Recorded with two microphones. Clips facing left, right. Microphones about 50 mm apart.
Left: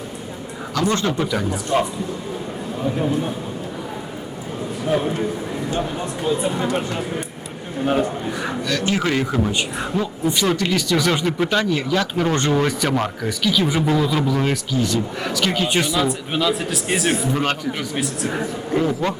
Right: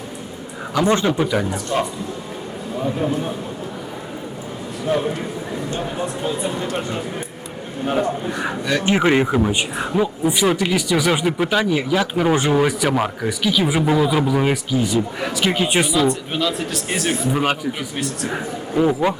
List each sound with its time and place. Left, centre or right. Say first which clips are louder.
0.7 s speech: right 3 dB; centre
1.7 s a man's voice: left 2 dB; centre
3.0 s speech: left 1 dB; centre
7.9 s speech: even; centre
8.4 s speech: even; centre
16.0 s speech: right 2 dB; centre
17.3 s speech: right 1 dB; centre
17.9 s speech: left 1 dB; centre
18.8 s speech: right 4 dB; centre